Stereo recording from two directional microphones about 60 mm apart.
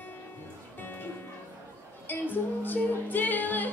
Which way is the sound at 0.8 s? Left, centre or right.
Left.